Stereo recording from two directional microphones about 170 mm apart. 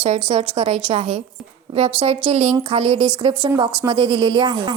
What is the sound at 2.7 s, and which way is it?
A woman's voice, 35° right (ahead or behind).